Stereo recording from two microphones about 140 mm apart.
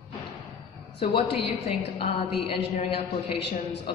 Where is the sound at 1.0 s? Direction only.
40° left (ahead or behind).